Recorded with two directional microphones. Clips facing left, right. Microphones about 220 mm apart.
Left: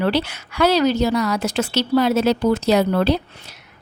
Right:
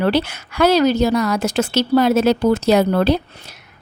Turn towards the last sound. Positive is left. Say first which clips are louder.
# right 2 dB
turn(degrees=-50)  # may be behind; listen again after turning